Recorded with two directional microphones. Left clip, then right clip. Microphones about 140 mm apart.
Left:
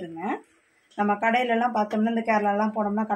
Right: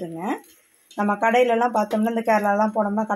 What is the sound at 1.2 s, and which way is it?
Speech, 50° right (ahead or behind).